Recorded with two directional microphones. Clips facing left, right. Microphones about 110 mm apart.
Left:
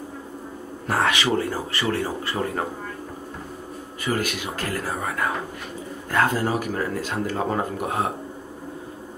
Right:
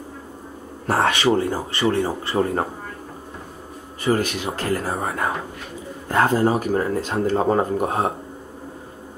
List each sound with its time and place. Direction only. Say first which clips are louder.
0.8 s speech: right 4 dB; 35° right (ahead or behind)
1.3 s speech: right 3 dB; 25° right (ahead or behind)
4.0 s speech: right 5 dB; 30° right (ahead or behind)